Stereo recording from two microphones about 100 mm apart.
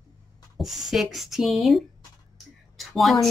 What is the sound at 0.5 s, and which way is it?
Speech, centre (ahead or behind).